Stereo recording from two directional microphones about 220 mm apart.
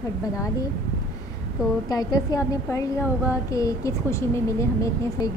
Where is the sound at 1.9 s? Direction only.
15° left (ahead or behind).